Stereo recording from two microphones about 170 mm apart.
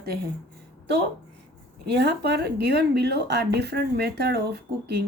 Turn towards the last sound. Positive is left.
turn(degrees=-70)  # may be behind; listen again after turning